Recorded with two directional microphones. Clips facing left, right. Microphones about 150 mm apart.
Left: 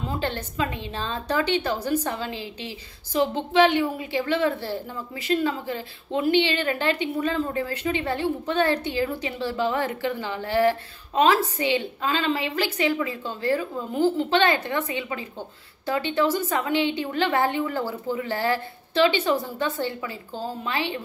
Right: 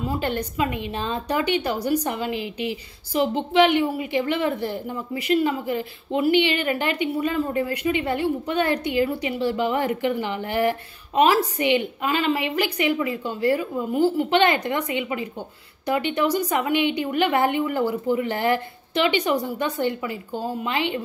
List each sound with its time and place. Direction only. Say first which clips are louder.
0.0 s a woman's voice: right 3 dB; 15° right (ahead or behind)